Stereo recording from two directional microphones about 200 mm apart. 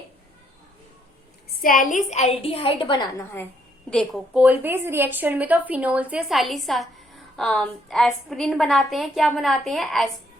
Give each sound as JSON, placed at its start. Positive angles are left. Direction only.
{"t": 1.5, "sound": "a woman's voice", "side_deg": 45}
{"t": 3.8, "sound": "a woman's voice", "side_deg": 5}
{"t": 4.4, "sound": "a woman's voice", "side_deg": -10}